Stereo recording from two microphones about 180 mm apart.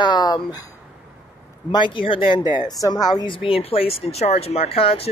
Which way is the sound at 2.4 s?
10° right (ahead or behind).